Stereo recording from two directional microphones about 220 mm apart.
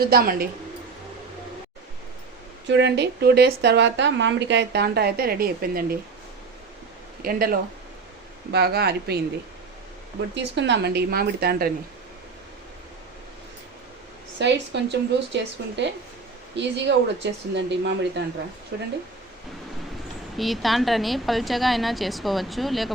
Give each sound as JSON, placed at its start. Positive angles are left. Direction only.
{"t": 0.0, "sound": "a woman's voice", "side_deg": -45}
{"t": 2.6, "sound": "a woman's voice", "side_deg": -50}
{"t": 7.2, "sound": "a woman's voice", "side_deg": -40}
{"t": 10.3, "sound": "a woman's voice", "side_deg": -55}
{"t": 14.3, "sound": "a woman's voice", "side_deg": -50}
{"t": 20.3, "sound": "a woman's voice", "side_deg": 0}